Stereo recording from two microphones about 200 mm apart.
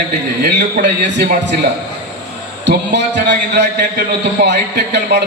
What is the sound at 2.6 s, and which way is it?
A man's voice, 55° right (ahead or behind).